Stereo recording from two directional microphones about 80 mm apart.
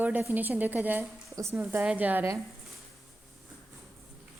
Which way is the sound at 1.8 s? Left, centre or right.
Centre.